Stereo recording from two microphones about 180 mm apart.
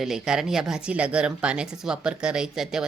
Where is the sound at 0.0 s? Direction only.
5° right (ahead or behind).